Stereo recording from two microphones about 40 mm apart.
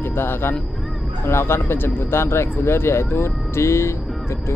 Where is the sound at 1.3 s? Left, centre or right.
Left.